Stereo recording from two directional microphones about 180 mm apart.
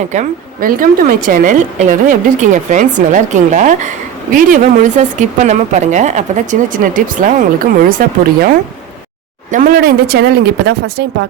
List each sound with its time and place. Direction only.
0.1 s a woman's voice: 45° right (ahead or behind)
9.5 s speech: 50° right (ahead or behind)